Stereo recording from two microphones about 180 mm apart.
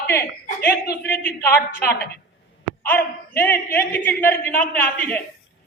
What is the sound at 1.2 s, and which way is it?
Speech, 10° left (ahead or behind).